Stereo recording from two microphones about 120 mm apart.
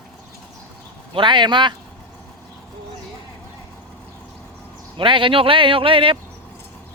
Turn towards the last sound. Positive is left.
turn(degrees=-45)  # may be behind; listen again after turning